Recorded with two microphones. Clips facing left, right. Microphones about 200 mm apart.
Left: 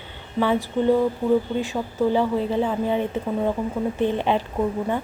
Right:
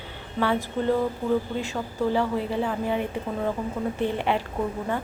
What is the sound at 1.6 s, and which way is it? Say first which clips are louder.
A woman's voice: left 4 dB; 15° left (ahead or behind).